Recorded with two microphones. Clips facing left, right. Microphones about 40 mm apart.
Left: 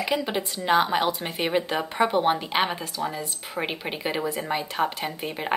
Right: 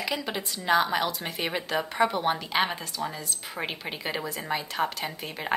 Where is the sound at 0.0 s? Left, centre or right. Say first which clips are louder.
Left 5 dB; left.